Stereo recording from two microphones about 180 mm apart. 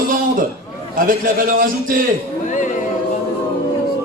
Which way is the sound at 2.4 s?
45° left (ahead or behind).